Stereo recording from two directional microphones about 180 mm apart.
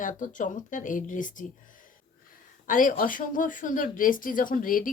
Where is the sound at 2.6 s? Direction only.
50° left (ahead or behind).